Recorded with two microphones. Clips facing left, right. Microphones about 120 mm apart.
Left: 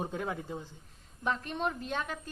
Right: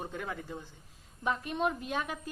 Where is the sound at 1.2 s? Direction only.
5° right (ahead or behind).